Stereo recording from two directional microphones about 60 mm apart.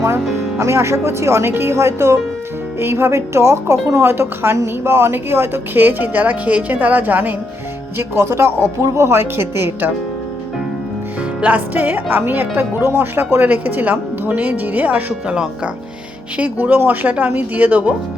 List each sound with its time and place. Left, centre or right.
0.6 s a woman's voice: right
7.9 s a woman's voice: right
11.3 s speech: right
16.4 s speech: right